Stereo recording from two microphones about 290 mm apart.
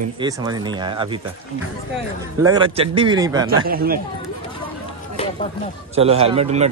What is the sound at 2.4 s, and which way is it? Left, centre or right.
Speech, centre.